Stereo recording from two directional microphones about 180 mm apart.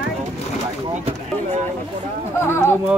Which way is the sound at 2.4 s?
15° left (ahead or behind).